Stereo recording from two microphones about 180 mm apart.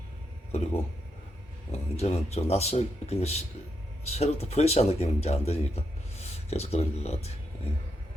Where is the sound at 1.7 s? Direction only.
35° left (ahead or behind).